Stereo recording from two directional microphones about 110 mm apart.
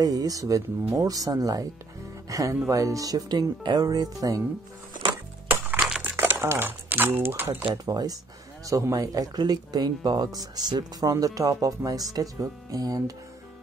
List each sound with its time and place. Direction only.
0.0 s speech: 35° right (ahead or behind)
5.8 s a sound: 5° right (ahead or behind)
6.0 s speech: 20° right (ahead or behind)
7.7 s speech: 35° right (ahead or behind)